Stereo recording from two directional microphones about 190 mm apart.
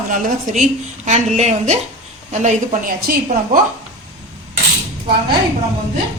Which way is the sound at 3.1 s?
50° right (ahead or behind).